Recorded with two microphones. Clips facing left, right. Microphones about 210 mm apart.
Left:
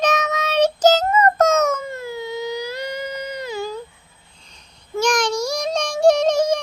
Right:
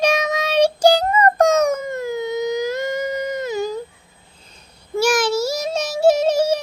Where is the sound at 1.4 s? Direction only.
15° right (ahead or behind).